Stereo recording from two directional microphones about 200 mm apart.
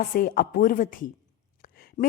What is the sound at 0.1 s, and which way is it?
A woman's voice, 45° left (ahead or behind).